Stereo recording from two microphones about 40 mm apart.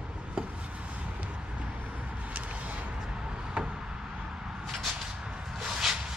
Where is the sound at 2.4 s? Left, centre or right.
Right.